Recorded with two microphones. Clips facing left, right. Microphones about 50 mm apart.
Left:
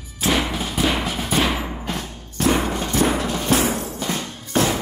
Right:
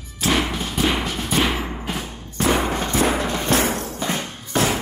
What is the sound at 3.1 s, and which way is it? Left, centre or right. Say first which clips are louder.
Music: even; right.